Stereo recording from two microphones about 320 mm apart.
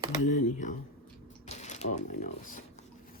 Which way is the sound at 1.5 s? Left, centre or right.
Left.